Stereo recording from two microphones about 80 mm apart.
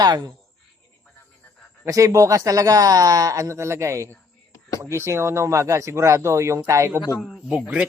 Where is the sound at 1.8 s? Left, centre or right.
Right.